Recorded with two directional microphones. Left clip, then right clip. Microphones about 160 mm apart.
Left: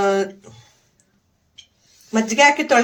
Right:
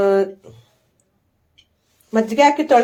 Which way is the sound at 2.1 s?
35° right (ahead or behind).